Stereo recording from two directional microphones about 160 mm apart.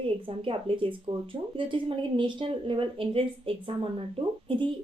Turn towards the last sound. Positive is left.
turn(degrees=-35)  # may be behind; listen again after turning